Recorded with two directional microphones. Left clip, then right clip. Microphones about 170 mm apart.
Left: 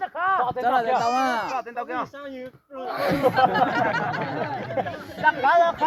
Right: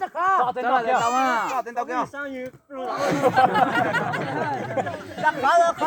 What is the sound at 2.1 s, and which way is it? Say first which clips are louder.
Speech: right 4 dB; 45° left (ahead or behind).